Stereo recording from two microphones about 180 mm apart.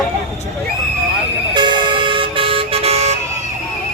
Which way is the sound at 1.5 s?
25° right (ahead or behind).